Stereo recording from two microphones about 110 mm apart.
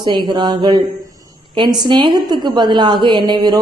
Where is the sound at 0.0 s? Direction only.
40° right (ahead or behind).